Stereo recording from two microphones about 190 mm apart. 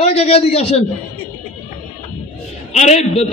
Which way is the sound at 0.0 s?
35° left (ahead or behind).